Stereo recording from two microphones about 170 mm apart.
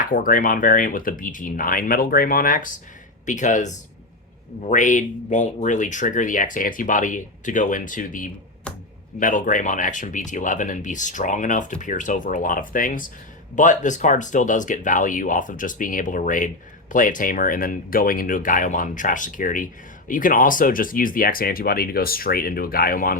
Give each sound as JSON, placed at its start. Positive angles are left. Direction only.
{"t": 0.0, "sound": "speech", "side_deg": 55}